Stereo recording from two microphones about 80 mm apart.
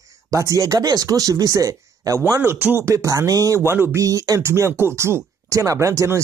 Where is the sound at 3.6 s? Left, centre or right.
Right.